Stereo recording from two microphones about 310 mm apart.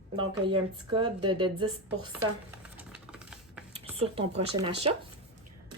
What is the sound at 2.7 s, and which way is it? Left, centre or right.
Typing, centre.